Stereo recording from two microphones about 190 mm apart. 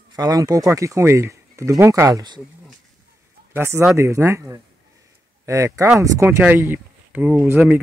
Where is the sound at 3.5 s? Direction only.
10° right (ahead or behind).